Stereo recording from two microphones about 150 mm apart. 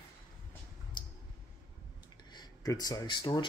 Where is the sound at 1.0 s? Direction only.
30° left (ahead or behind).